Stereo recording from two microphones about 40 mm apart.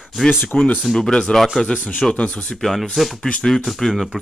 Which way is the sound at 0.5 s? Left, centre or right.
Left.